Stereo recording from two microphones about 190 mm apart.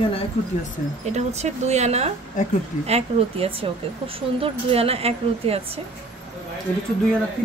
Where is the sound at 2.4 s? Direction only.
40° left (ahead or behind).